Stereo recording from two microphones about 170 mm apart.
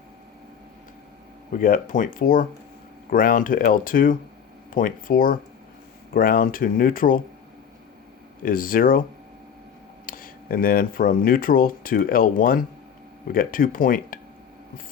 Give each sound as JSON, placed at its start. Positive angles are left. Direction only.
{"t": 1.5, "sound": "speech", "side_deg": 55}
{"t": 8.4, "sound": "speech", "side_deg": 55}
{"t": 10.1, "sound": "speech", "side_deg": 55}